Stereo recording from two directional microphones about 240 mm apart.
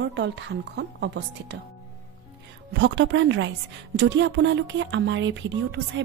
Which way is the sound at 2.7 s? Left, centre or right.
Right.